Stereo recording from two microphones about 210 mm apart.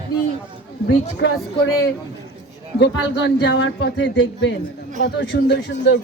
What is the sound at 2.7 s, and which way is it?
Speech, 55° left (ahead or behind).